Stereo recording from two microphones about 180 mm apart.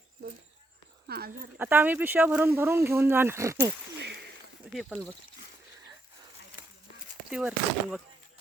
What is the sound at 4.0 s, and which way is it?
Speech, 70° right (ahead or behind).